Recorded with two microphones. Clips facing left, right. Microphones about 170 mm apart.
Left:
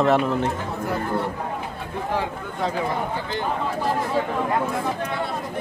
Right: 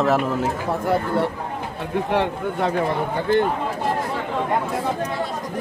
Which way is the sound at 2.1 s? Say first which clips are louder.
Right 5 dB; 65° right (ahead or behind).